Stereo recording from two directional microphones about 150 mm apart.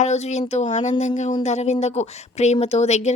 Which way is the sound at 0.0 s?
50° left (ahead or behind).